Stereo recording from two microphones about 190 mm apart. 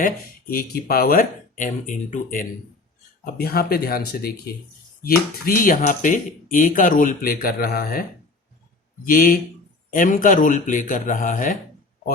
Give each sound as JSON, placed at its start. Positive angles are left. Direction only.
{"t": 0.5, "sound": "speech", "side_deg": 50}
{"t": 9.0, "sound": "speech", "side_deg": 45}